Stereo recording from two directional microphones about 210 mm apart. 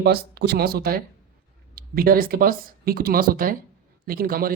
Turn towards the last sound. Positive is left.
turn(degrees=-45)  # may be behind; listen again after turning